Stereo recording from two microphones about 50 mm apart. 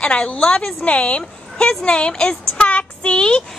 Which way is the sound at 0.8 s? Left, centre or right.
Left.